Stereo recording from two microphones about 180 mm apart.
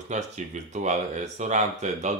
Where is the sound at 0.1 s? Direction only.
40° right (ahead or behind).